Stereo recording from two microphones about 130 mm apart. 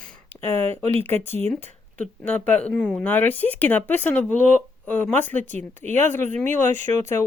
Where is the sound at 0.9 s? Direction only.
15° left (ahead or behind).